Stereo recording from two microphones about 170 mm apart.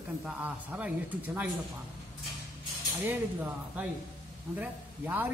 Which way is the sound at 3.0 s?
10° right (ahead or behind).